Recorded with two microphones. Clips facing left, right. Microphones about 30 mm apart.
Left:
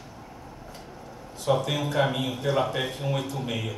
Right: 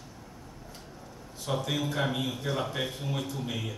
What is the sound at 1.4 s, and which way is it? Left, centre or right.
A man's voice, centre.